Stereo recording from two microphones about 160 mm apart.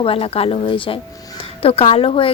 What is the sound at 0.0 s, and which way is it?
A woman's voice, 35° left (ahead or behind).